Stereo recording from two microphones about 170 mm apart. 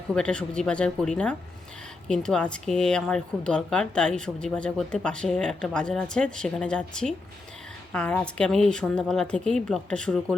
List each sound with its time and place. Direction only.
0.1 s speech: 5° left (ahead or behind)